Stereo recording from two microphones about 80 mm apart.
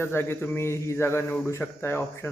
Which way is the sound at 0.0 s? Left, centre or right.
Left.